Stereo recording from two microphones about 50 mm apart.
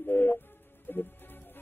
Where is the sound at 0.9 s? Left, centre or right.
Left.